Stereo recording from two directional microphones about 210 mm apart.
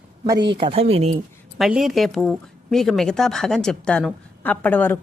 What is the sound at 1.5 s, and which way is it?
A woman's voice, centre (ahead or behind).